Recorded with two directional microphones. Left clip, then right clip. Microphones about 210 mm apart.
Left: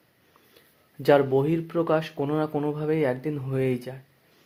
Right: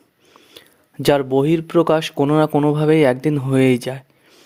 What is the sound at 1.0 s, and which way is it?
Speech, 50° right (ahead or behind).